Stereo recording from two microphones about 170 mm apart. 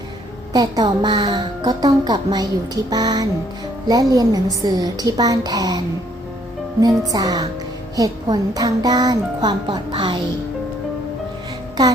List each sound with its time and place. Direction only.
0.5 s speech: 25° right (ahead or behind)
6.8 s speech: 20° right (ahead or behind)